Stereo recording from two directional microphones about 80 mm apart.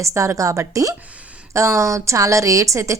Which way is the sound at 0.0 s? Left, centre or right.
Right.